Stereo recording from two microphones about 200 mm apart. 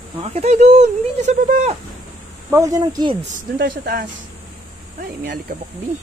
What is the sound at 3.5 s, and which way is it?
Speech, 50° right (ahead or behind).